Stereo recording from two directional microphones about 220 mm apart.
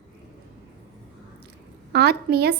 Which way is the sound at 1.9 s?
50° right (ahead or behind).